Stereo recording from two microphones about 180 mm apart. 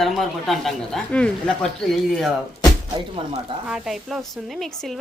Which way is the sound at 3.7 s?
5° right (ahead or behind).